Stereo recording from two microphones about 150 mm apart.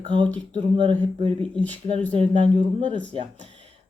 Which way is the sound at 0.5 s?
35° right (ahead or behind).